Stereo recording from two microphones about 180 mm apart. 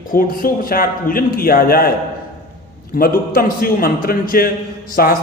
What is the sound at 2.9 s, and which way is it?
A man's voice, 55° left (ahead or behind).